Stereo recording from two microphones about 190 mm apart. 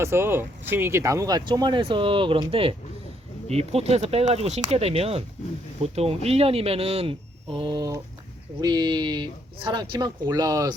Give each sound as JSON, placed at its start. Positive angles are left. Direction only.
{"t": 0.0, "sound": "speech", "side_deg": -10}